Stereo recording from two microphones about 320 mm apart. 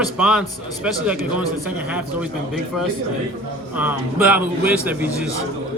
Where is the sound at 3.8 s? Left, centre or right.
Centre.